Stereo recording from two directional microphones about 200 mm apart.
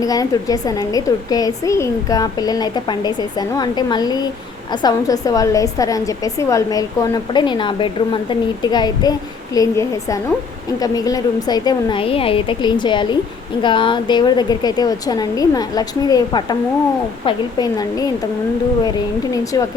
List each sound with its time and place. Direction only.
0.0 s a woman's voice: 20° left (ahead or behind)